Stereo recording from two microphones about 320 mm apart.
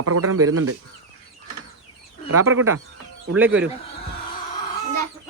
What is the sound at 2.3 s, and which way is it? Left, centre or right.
Speech, right.